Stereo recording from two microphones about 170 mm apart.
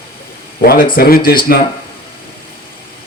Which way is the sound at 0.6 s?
65° left (ahead or behind).